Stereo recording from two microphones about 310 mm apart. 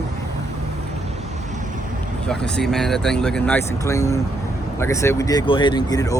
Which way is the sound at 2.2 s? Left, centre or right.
Centre.